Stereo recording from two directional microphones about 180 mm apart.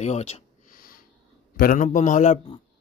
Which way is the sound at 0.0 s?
35° left (ahead or behind).